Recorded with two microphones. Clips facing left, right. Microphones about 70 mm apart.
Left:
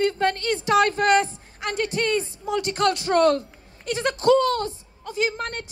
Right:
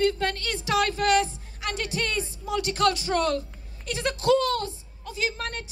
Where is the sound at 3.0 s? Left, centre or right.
Left.